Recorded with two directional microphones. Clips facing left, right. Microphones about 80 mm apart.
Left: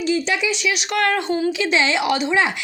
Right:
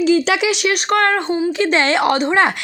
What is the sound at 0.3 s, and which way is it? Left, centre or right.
Speech, right.